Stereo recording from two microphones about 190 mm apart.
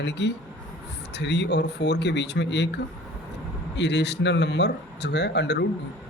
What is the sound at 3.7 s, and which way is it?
A man's voice, 65° left (ahead or behind).